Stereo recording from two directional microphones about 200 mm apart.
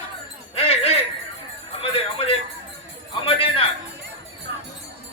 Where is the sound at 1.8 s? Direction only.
30° left (ahead or behind).